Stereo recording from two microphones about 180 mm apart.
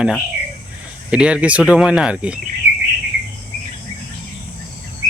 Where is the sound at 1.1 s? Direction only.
5° right (ahead or behind).